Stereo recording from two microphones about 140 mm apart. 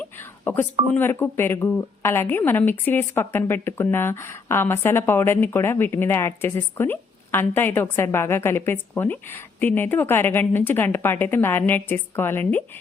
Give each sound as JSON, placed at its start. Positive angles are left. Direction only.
{"t": 0.0, "sound": "telephone dialing", "side_deg": 15}
{"t": 0.9, "sound": "a woman's voice", "side_deg": 15}